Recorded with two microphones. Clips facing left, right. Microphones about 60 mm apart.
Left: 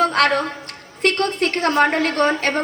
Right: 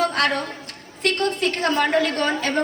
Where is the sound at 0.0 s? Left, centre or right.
Left.